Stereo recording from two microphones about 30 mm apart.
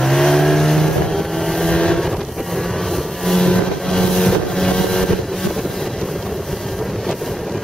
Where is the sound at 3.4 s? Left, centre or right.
Left.